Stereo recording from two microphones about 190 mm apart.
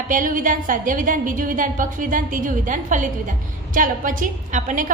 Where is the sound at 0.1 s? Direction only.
45° right (ahead or behind).